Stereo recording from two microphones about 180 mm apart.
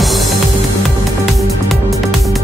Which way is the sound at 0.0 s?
Centre (ahead or behind).